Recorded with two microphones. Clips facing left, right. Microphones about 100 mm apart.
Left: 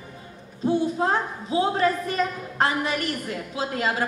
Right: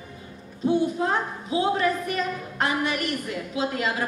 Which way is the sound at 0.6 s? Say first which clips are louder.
Even; 30° left (ahead or behind).